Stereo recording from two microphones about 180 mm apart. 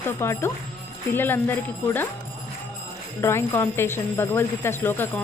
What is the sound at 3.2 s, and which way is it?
Speech, 15° left (ahead or behind).